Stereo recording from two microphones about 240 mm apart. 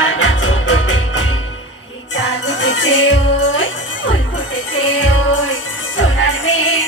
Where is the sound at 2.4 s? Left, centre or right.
Left.